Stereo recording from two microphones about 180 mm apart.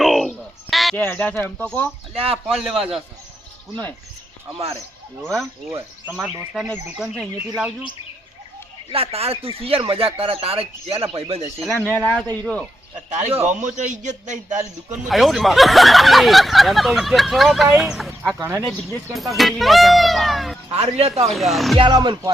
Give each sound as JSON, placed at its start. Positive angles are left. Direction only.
{"t": 0.0, "sound": "a sound", "side_deg": 0}
{"t": 1.0, "sound": "speech", "side_deg": 10}
{"t": 4.5, "sound": "speech", "side_deg": -30}
{"t": 5.2, "sound": "speech", "side_deg": 0}
{"t": 8.9, "sound": "speech", "side_deg": -35}
{"t": 11.7, "sound": "speech", "side_deg": 10}
{"t": 13.1, "sound": "speech", "side_deg": -40}
{"t": 15.0, "sound": "speech", "side_deg": 0}
{"t": 18.3, "sound": "speech", "side_deg": -15}
{"t": 19.4, "sound": "speech", "side_deg": 0}
{"t": 20.7, "sound": "speech", "side_deg": -35}
{"t": 21.3, "sound": "speech", "side_deg": 0}
{"t": 21.8, "sound": "speech", "side_deg": -25}